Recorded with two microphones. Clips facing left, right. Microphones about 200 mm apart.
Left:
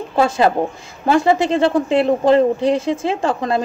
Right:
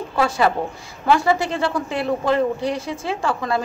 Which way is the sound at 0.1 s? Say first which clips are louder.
Left 4 dB; 25° left (ahead or behind).